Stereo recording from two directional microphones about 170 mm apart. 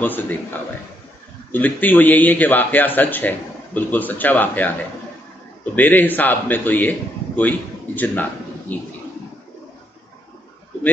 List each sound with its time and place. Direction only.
0.0 s a man's voice: 10° left (ahead or behind)
5.8 s a man's voice: 10° left (ahead or behind)